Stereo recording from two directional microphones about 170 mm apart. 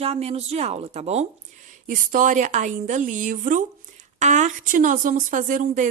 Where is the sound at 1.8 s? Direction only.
50° right (ahead or behind).